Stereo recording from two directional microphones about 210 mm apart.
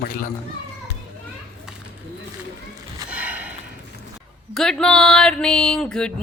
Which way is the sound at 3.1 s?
5° right (ahead or behind).